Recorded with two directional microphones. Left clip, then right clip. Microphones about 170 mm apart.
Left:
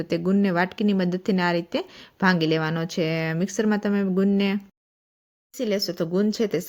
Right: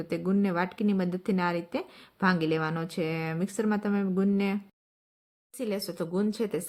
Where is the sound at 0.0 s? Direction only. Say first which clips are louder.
Left 6 dB; 20° left (ahead or behind).